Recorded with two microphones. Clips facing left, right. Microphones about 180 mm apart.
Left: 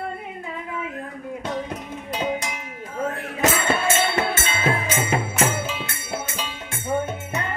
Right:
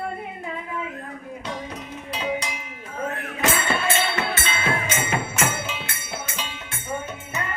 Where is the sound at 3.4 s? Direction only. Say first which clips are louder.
Left 3 dB; 45° left (ahead or behind).